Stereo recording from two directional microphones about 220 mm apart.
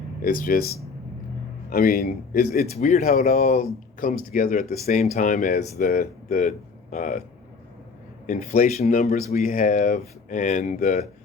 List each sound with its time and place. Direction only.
0.2 s speech: 40° left (ahead or behind)
1.7 s speech: 40° left (ahead or behind)
8.3 s speech: 35° left (ahead or behind)